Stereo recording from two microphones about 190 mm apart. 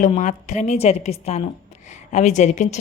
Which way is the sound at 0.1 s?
40° left (ahead or behind).